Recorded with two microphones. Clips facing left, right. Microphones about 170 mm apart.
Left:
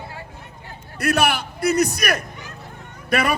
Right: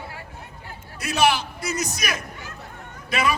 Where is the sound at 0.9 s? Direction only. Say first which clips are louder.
Left 1 dB; 60° left (ahead or behind).